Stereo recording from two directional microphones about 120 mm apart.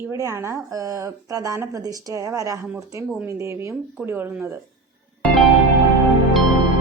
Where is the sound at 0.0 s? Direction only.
25° right (ahead or behind).